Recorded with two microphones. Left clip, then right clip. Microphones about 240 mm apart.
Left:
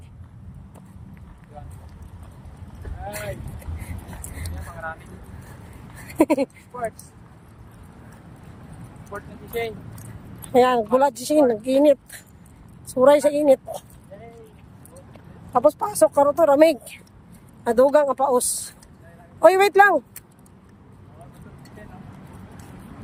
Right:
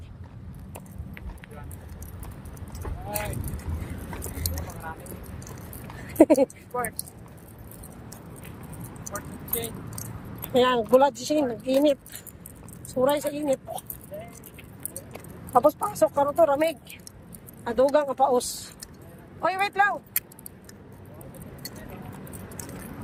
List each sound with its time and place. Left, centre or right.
4.4 s vehicle: right
6.1 s speech: centre
9.6 s speech: centre
10.5 s speech: centre
13.1 s speech: left
15.5 s speech: centre